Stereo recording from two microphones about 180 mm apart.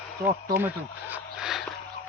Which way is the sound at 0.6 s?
10° right (ahead or behind).